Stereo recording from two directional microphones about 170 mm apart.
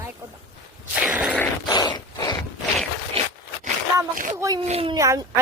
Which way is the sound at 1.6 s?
25° left (ahead or behind).